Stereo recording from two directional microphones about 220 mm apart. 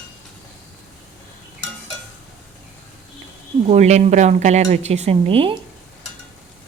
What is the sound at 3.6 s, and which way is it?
Speech, 30° right (ahead or behind).